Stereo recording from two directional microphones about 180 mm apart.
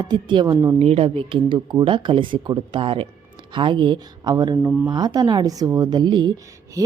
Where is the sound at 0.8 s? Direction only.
30° right (ahead or behind).